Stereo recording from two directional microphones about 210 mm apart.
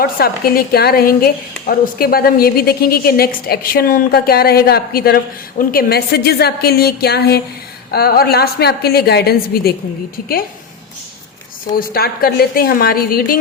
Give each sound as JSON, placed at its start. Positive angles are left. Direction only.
{"t": 0.0, "sound": "a woman's voice", "side_deg": 45}
{"t": 11.7, "sound": "a woman's voice", "side_deg": 45}